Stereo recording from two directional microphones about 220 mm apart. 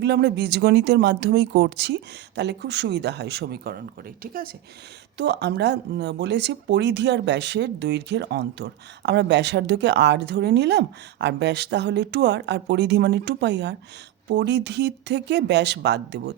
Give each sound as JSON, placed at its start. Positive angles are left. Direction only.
{"t": 0.0, "sound": "speech", "side_deg": -50}
{"t": 5.1, "sound": "speech", "side_deg": -50}